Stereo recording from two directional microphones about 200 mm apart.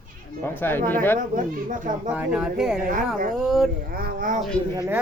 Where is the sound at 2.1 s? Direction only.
5° right (ahead or behind).